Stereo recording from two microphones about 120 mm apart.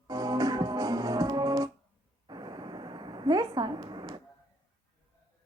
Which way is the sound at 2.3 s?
35° right (ahead or behind).